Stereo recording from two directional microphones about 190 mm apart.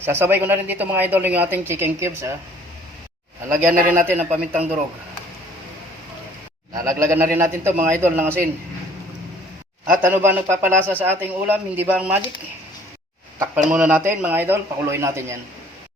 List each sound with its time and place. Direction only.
0.0 s speech: 10° right (ahead or behind)
3.6 s speech: 10° right (ahead or behind)
6.8 s speech: 15° right (ahead or behind)
10.0 s speech: 10° right (ahead or behind)
13.7 s speech: 5° right (ahead or behind)